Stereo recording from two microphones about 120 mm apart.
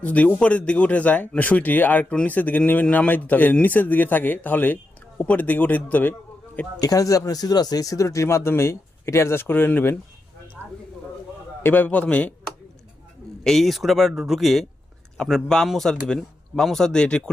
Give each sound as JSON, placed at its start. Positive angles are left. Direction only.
{"t": 0.0, "sound": "speech", "side_deg": 10}
{"t": 6.7, "sound": "speech", "side_deg": 30}
{"t": 11.6, "sound": "speech", "side_deg": 15}
{"t": 13.4, "sound": "speech", "side_deg": 0}